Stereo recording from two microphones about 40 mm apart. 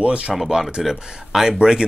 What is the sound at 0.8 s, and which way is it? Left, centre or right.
Speech, centre.